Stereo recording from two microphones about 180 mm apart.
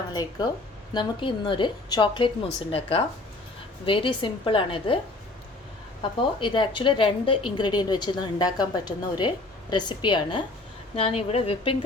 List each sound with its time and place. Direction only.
0.1 s a woman's voice: 20° left (ahead or behind)
3.8 s a woman's voice: 30° left (ahead or behind)
6.0 s a woman's voice: 25° left (ahead or behind)